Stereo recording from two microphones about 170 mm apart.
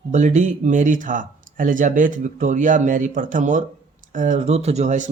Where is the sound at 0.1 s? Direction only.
45° right (ahead or behind).